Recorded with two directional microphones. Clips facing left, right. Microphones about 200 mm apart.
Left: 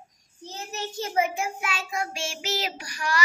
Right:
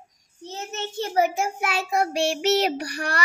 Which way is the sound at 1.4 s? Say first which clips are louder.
Right 5 dB; 60° right (ahead or behind).